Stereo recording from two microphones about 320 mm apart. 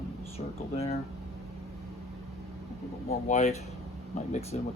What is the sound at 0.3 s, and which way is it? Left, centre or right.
Speech, centre.